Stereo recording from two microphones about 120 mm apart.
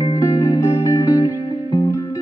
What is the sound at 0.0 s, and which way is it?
Music, 25° left (ahead or behind).